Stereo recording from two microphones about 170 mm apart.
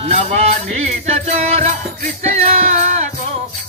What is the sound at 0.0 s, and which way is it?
Music, 40° right (ahead or behind).